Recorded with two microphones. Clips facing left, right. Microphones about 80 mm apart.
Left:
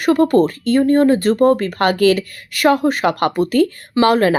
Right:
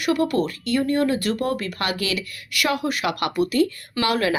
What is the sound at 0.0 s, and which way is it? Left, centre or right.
Speech, left.